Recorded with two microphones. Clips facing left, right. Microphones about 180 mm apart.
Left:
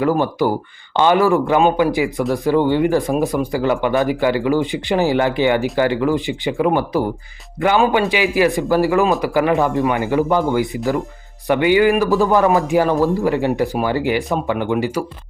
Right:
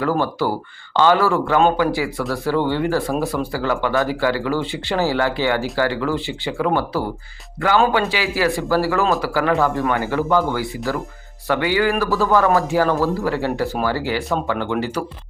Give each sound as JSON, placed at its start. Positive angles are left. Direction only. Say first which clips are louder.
{"t": 0.0, "sound": "speech", "louder": "left 3 dB", "side_deg": 15}